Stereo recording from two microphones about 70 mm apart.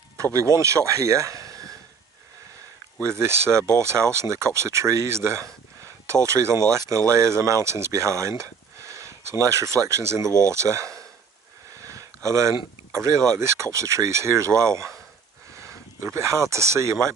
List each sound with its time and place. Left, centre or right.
0.2 s speech: right
3.0 s speech: right
11.8 s a sound: right
13.4 s speech: right